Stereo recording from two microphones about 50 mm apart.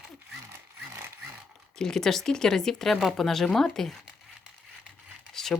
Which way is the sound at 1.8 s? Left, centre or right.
Centre.